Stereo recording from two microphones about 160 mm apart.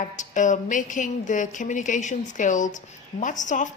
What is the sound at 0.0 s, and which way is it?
A woman's voice, 50° left (ahead or behind).